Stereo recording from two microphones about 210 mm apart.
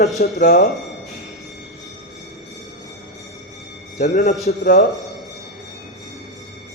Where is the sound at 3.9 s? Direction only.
35° left (ahead or behind).